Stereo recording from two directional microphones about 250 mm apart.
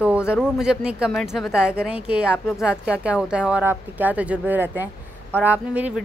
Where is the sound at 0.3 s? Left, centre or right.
Centre.